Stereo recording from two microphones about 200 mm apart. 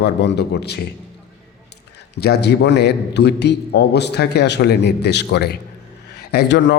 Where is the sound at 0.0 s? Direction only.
60° left (ahead or behind).